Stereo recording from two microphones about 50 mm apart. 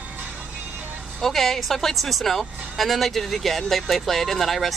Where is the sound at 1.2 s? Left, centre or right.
Centre.